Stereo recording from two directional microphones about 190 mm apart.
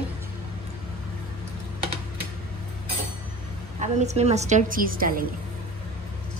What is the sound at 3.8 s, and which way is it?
A woman's voice, 35° right (ahead or behind).